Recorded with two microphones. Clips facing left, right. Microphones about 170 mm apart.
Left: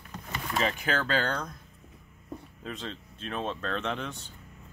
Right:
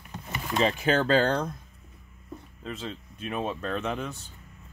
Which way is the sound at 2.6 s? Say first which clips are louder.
Right 4 dB; 5° right (ahead or behind).